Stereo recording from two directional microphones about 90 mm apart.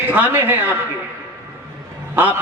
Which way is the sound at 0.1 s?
20° right (ahead or behind).